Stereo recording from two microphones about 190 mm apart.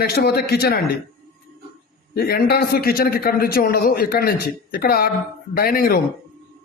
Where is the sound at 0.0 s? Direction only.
55° left (ahead or behind).